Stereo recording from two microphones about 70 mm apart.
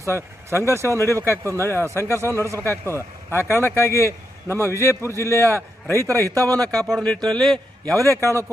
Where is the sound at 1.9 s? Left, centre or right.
Left.